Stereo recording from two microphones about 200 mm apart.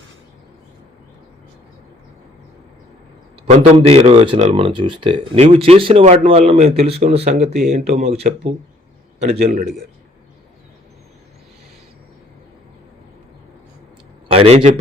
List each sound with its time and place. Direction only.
3.4 s speech: 30° right (ahead or behind)
9.4 s a man's voice: 50° right (ahead or behind)
14.3 s a man's voice: 30° right (ahead or behind)